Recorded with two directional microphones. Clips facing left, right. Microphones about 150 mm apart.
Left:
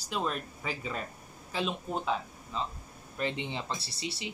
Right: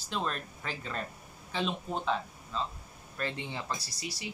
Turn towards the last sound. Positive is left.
turn(degrees=25)  # may be behind; listen again after turning